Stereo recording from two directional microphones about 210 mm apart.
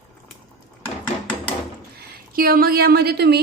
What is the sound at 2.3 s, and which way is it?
A woman's voice, 45° right (ahead or behind).